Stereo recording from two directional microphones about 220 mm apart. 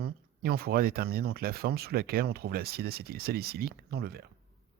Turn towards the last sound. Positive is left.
turn(degrees=-45)  # may be behind; listen again after turning